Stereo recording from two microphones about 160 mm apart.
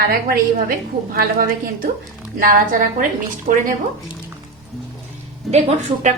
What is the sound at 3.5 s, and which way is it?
Speech, 60° right (ahead or behind).